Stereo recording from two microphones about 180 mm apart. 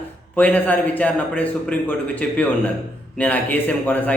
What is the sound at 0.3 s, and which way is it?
A man's voice, 10° left (ahead or behind).